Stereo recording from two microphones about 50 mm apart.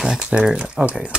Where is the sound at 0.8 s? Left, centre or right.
Right.